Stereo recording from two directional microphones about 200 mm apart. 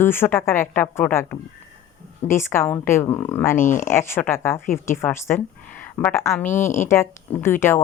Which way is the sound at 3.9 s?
10° left (ahead or behind).